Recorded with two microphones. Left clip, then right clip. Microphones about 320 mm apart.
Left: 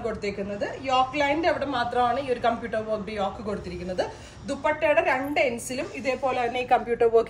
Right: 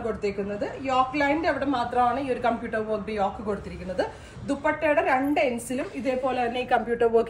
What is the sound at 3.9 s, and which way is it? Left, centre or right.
A woman's voice, centre.